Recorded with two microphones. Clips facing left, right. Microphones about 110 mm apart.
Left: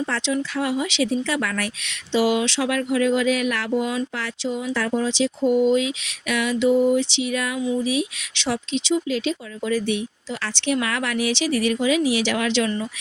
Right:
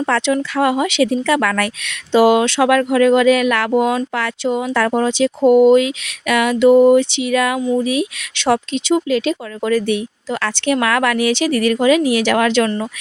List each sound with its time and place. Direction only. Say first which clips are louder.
0.0 s speech: right 7 dB; 65° right (ahead or behind)
7.7 s speech: right 5 dB; 55° right (ahead or behind)